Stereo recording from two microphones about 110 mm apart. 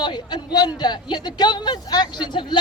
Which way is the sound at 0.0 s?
45° left (ahead or behind).